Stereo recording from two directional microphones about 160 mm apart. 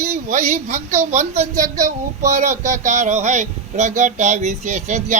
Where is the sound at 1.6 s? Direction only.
20° right (ahead or behind).